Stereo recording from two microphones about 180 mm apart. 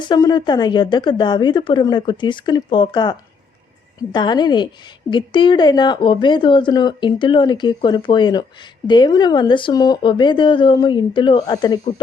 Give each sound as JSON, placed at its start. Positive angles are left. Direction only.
{"t": 0.0, "sound": "speech", "side_deg": 20}